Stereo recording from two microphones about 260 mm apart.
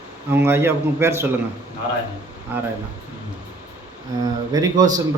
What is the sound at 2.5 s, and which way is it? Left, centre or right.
Speech, centre.